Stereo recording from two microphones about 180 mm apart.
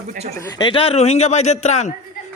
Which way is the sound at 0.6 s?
30° left (ahead or behind).